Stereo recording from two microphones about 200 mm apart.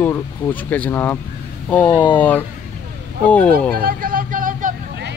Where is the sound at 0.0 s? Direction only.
10° left (ahead or behind).